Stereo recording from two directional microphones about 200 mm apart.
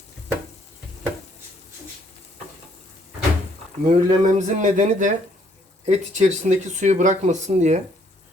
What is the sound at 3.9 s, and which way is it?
Speech, 40° right (ahead or behind).